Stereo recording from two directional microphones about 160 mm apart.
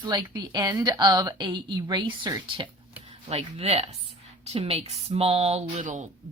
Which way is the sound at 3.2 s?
40° right (ahead or behind).